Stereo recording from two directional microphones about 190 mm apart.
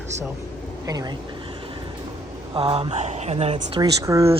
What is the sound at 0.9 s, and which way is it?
Speech, 20° right (ahead or behind).